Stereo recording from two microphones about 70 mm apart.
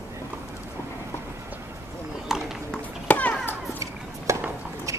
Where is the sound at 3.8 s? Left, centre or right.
Right.